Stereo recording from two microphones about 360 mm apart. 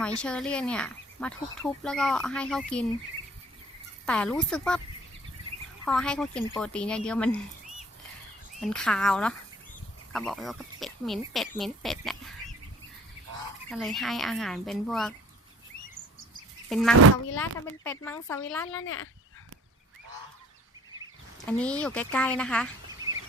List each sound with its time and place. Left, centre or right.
0.2 s speech: centre
4.0 s speech: centre
5.8 s speech: centre
8.6 s speech: centre
13.7 s speech: centre
16.6 s a sound: centre
17.4 s speech: centre
18.7 s speech: left
21.4 s speech: centre
23.0 s a sound: centre